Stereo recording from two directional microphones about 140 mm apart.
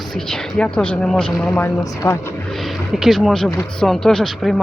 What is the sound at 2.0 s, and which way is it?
Speech, 20° left (ahead or behind).